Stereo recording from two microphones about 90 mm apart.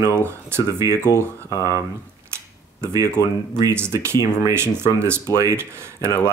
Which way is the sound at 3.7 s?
30° right (ahead or behind).